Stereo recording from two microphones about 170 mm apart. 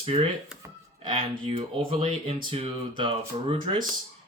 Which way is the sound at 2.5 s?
30° right (ahead or behind).